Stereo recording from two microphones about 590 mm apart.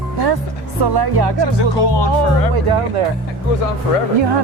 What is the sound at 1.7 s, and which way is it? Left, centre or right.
Speech, left.